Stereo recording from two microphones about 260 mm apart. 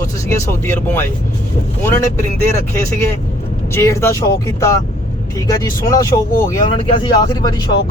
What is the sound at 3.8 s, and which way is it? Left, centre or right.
Speech, centre.